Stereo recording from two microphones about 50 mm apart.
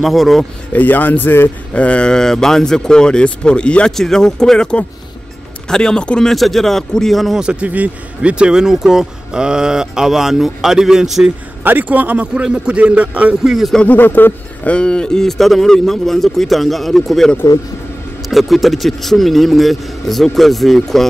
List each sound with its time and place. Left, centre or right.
0.0 s a man's voice: centre
0.7 s speech: left
1.7 s speech: left
3.9 s speech: centre
6.3 s a man's voice: centre
7.6 s speech: right; by 11.2 s centre
11.6 s a man's voice: right
13.4 s speech: centre
13.8 s speech: left
14.7 s speech: left
15.2 s a man's voice: centre
18.3 s a man's voice: centre